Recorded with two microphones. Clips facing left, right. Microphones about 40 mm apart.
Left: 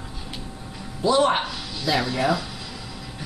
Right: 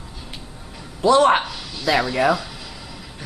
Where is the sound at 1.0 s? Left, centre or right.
Right.